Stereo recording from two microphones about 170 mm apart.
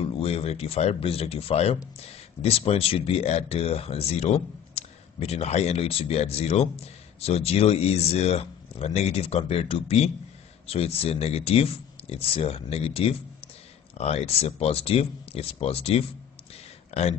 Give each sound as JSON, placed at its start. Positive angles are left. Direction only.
{"t": 0.0, "sound": "speech", "side_deg": 35}